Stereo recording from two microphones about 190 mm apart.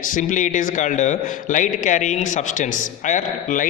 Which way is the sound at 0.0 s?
45° left (ahead or behind).